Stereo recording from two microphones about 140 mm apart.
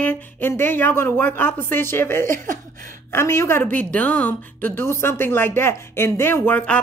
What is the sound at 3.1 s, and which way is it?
A woman's voice, 20° left (ahead or behind).